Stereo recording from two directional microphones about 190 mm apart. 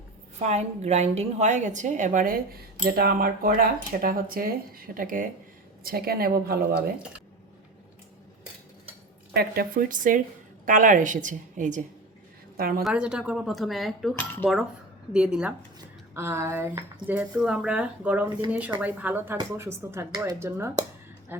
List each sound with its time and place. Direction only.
0.4 s a woman's voice: 35° right (ahead or behind); by 6.7 s 50° right (ahead or behind)
9.3 s a woman's voice: 55° right (ahead or behind)
12.5 s a woman's voice: 55° right (ahead or behind)
12.8 s speech: 5° right (ahead or behind)
15.1 s speech: 5° right (ahead or behind)